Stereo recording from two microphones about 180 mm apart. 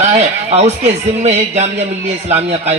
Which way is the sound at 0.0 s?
40° right (ahead or behind).